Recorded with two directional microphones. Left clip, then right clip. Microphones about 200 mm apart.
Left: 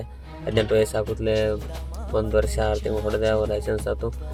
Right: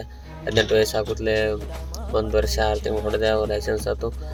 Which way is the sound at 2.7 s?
Centre (ahead or behind).